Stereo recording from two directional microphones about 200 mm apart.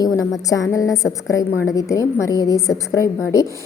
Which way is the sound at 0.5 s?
15° left (ahead or behind).